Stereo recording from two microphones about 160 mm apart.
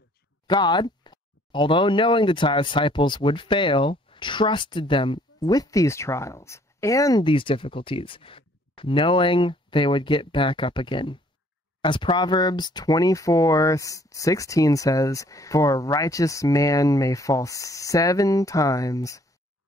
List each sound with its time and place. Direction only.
0.5 s speech: 30° left (ahead or behind)